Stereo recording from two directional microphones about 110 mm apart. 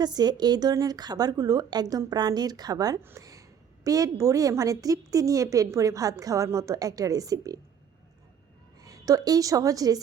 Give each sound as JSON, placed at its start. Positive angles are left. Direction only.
{"t": 0.0, "sound": "a woman's voice", "side_deg": -40}
{"t": 3.2, "sound": "a sound", "side_deg": -30}
{"t": 3.8, "sound": "a woman's voice", "side_deg": -35}
{"t": 8.8, "sound": "a woman's voice", "side_deg": -35}